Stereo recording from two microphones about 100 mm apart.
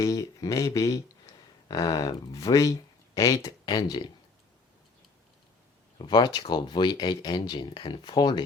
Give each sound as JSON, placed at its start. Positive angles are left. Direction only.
{"t": 0.0, "sound": "speech", "side_deg": 35}
{"t": 6.0, "sound": "speech", "side_deg": 45}